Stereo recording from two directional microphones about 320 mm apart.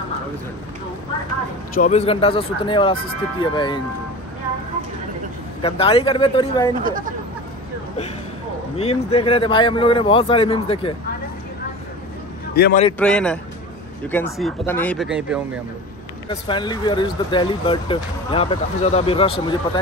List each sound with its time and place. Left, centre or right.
1.8 s speech: left
5.6 s speech: centre
6.8 s speech: right
8.7 s speech: centre
12.5 s a man's voice: left
13.0 s speech: centre
16.3 s speech: centre